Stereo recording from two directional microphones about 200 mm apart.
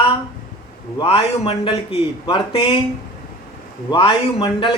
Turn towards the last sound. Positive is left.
turn(degrees=25)  # may be behind; listen again after turning